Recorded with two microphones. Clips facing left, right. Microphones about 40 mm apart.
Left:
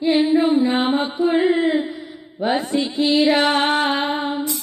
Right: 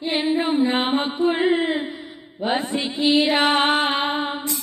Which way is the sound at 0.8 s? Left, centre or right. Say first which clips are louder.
Left 2 dB; right.